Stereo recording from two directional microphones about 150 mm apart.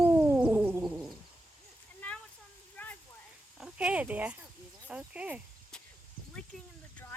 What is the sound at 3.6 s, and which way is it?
Speech, 10° right (ahead or behind).